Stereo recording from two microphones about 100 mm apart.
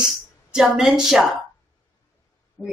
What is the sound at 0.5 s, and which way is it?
Speech, 5° right (ahead or behind).